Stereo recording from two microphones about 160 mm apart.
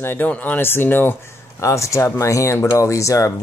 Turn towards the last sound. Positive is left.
turn(degrees=20)  # may be behind; listen again after turning